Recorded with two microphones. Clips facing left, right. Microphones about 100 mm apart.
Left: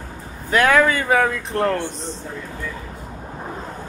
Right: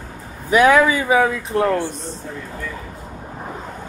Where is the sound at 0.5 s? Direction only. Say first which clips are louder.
Right 3 dB; 10° right (ahead or behind).